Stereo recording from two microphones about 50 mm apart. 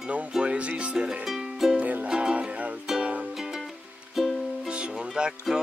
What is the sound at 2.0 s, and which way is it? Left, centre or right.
Music, centre.